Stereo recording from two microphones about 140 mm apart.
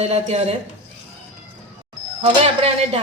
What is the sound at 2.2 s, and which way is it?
Speech, 45° right (ahead or behind).